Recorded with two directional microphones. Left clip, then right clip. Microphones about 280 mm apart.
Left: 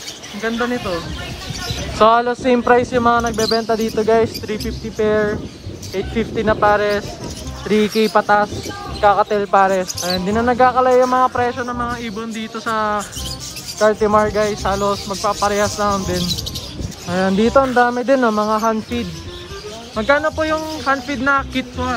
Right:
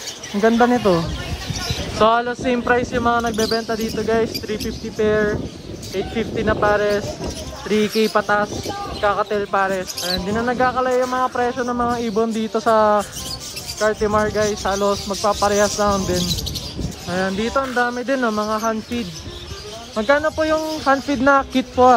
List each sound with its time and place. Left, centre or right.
2.0 s speech: centre
13.7 s speech: centre